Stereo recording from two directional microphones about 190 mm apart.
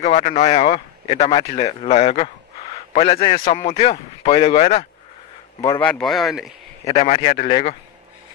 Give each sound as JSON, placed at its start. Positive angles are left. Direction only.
{"t": 0.0, "sound": "a man's voice", "side_deg": 35}
{"t": 5.8, "sound": "speech", "side_deg": 5}
{"t": 6.8, "sound": "speech", "side_deg": 30}